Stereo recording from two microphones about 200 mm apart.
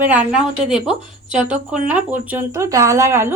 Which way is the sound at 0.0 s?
5° right (ahead or behind).